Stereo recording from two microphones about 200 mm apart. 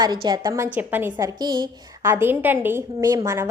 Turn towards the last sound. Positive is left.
turn(degrees=-15)  # may be behind; listen again after turning